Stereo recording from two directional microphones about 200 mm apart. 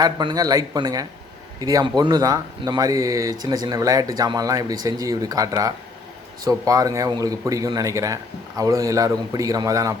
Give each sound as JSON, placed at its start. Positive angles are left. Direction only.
{"t": 0.0, "sound": "speech", "side_deg": -20}